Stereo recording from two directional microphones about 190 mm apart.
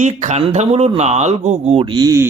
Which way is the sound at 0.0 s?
35° right (ahead or behind).